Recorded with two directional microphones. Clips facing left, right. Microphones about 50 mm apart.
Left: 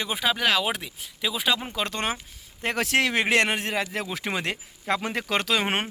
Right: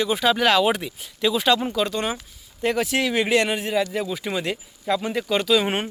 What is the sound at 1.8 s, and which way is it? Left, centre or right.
A man's voice, left.